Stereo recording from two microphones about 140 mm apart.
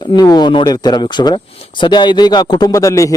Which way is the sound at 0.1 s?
30° left (ahead or behind).